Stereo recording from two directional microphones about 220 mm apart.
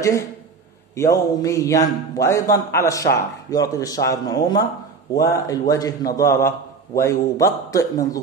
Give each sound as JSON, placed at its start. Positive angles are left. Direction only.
{"t": 0.0, "sound": "a man's voice", "side_deg": 15}